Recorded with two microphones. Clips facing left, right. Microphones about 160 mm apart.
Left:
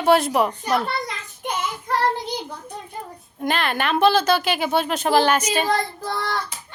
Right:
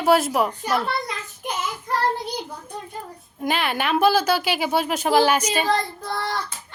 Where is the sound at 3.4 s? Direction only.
10° right (ahead or behind).